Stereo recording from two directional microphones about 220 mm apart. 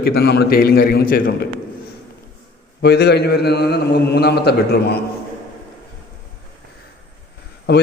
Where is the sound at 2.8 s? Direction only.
50° left (ahead or behind).